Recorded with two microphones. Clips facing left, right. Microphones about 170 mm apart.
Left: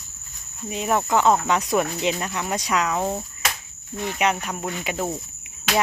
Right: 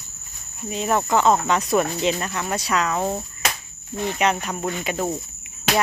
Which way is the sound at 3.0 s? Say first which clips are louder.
Right 1 dB; centre (ahead or behind).